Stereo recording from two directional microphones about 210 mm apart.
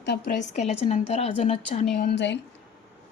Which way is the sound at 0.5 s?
30° left (ahead or behind).